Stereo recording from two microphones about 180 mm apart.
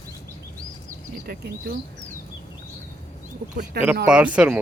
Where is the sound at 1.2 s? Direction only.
55° right (ahead or behind).